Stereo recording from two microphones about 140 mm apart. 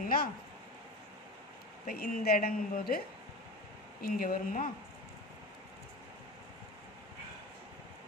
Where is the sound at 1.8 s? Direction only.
85° left.